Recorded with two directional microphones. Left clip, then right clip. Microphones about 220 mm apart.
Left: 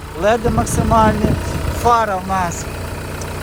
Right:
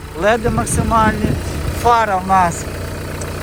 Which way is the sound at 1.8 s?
15° left (ahead or behind).